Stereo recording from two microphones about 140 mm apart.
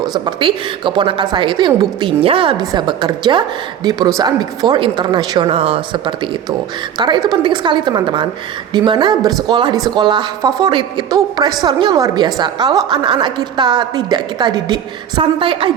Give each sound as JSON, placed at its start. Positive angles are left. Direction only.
{"t": 0.0, "sound": "speech", "side_deg": -30}
{"t": 5.5, "sound": "speech", "side_deg": -45}